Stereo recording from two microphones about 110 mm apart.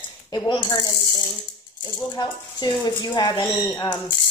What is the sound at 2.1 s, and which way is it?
A woman's voice, 40° left (ahead or behind).